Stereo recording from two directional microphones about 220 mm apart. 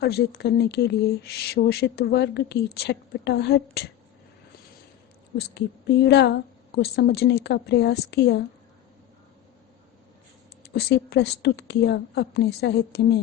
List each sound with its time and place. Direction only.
0.0 s speech: 45° left (ahead or behind)
5.4 s speech: 50° left (ahead or behind)
10.6 s speech: 45° left (ahead or behind)